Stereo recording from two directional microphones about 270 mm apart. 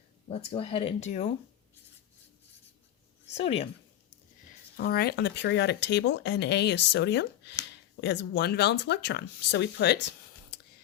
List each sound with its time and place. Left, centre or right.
0.3 s speech: left
3.2 s speech: left
4.8 s speech: left